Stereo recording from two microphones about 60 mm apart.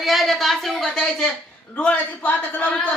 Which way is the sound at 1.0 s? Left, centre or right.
Centre.